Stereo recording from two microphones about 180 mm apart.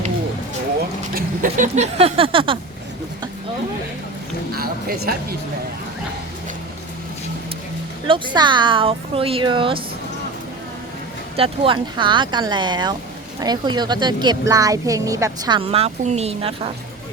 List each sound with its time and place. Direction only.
1.1 s vehicle: 45° right (ahead or behind); by 2.6 s 30° right (ahead or behind)
4.5 s music: 55° right (ahead or behind)
8.0 s a woman's voice: 30° right (ahead or behind)
11.3 s a woman's voice: 30° right (ahead or behind)